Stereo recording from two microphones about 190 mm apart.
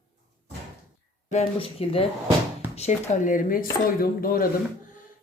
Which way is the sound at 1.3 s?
35° left (ahead or behind).